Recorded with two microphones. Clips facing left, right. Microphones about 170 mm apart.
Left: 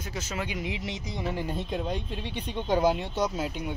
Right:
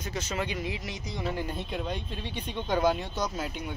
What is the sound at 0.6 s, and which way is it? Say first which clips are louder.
Speech: left 2 dB; 20° left (ahead or behind).